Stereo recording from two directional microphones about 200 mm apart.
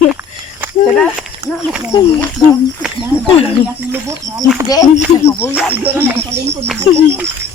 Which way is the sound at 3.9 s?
10° right (ahead or behind).